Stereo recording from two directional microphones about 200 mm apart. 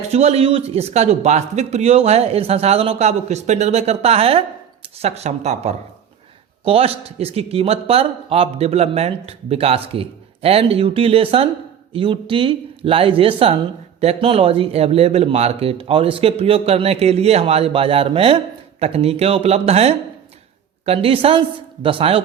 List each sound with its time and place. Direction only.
0.1 s a man's voice: 30° right (ahead or behind)